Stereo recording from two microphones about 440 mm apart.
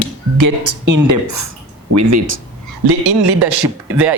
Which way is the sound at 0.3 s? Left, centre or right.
Right.